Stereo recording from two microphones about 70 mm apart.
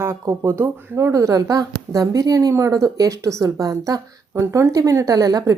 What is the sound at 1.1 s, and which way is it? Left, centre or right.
A woman's voice, right.